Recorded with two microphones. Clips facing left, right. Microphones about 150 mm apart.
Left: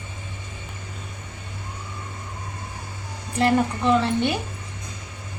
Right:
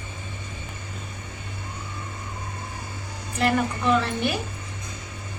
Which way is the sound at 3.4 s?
25° left (ahead or behind).